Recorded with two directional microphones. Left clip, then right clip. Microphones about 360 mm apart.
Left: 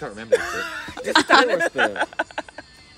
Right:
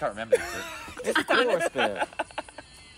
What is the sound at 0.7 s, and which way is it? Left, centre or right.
Snicker, left.